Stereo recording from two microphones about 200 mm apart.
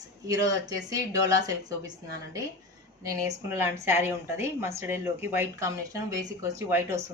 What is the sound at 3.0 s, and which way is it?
A woman's voice, 15° right (ahead or behind).